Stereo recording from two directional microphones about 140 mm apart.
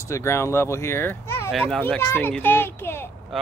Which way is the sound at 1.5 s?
Centre (ahead or behind).